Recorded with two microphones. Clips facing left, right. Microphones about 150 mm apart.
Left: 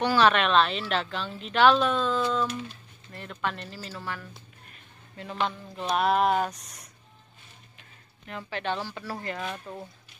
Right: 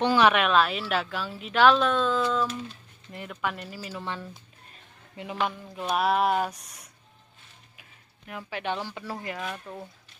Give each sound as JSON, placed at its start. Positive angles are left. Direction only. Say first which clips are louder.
{"t": 0.0, "sound": "a woman's voice", "louder": "right 1 dB", "side_deg": -15}
{"t": 3.1, "sound": "speech", "louder": "right 1 dB", "side_deg": -15}
{"t": 4.0, "sound": "speech", "louder": "right 2 dB", "side_deg": -25}
{"t": 5.8, "sound": "a woman's voice", "louder": "left 1 dB", "side_deg": -5}
{"t": 8.3, "sound": "speech", "louder": "even", "side_deg": -10}